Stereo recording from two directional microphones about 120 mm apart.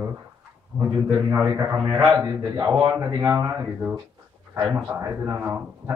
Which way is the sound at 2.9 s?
20° right (ahead or behind).